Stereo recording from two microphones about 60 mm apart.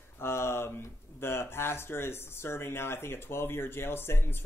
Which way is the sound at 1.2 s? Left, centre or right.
Left.